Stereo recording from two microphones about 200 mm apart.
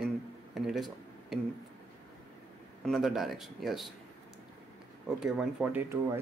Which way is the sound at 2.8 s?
Centre (ahead or behind).